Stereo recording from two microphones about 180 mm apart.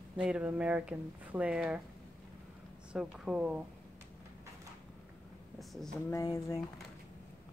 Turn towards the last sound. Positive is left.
turn(degrees=20)  # may be behind; listen again after turning